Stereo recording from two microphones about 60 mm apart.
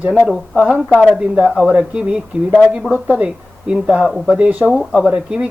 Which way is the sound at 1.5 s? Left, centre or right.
Centre.